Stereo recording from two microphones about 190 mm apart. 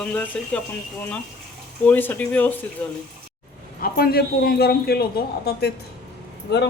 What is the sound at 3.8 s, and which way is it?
A man's voice, 55° left (ahead or behind).